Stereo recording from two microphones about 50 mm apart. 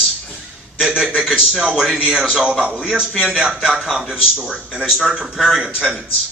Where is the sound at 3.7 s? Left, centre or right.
Centre.